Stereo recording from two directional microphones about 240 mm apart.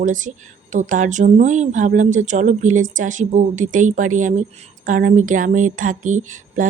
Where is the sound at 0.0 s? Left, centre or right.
Right.